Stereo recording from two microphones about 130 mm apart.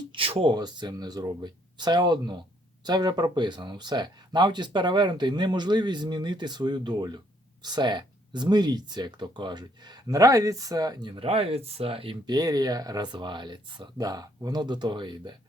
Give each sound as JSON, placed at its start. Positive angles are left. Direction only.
{"t": 0.1, "sound": "a sound", "side_deg": -45}
{"t": 0.5, "sound": "speech", "side_deg": -30}
{"t": 12.3, "sound": "speech", "side_deg": -30}